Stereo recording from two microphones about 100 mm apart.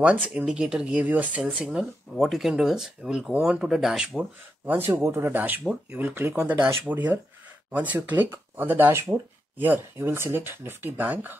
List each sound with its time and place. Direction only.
0.0 s speech: 10° right (ahead or behind)
4.6 s speech: 20° right (ahead or behind)